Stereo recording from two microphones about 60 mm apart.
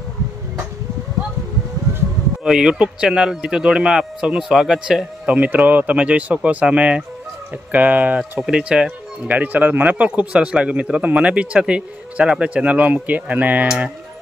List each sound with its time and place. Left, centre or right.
2.4 s speech: centre
9.3 s speech: right